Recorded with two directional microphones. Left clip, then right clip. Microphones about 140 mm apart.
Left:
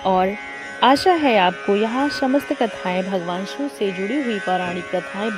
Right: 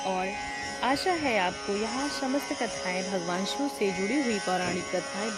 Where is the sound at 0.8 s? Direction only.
60° left (ahead or behind).